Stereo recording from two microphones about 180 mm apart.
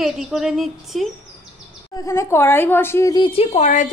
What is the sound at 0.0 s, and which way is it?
Speech, centre (ahead or behind).